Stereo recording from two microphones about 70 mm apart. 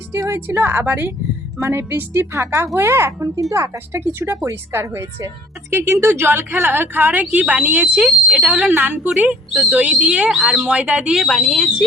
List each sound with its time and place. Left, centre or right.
0.1 s a woman's voice: right; by 8.0 s centre
8.0 s a sound: centre
8.4 s speech: centre
8.7 s speech: right
9.6 s speech: centre
11.1 s speech: centre